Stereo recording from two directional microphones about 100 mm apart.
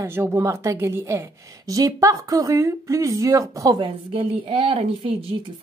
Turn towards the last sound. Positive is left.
turn(degrees=-75)  # may be behind; listen again after turning